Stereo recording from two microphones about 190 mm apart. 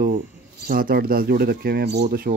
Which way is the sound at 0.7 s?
50° right (ahead or behind).